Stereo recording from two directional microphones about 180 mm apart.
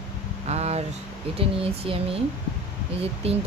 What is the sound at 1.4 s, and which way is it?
Speech, 30° right (ahead or behind).